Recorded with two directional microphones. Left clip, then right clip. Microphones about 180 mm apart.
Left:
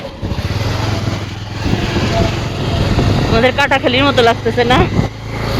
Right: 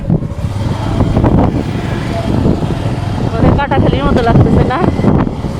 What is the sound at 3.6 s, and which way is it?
Speech, 25° left (ahead or behind).